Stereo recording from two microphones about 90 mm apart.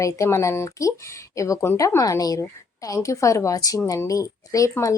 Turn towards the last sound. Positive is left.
turn(degrees=35)  # may be behind; listen again after turning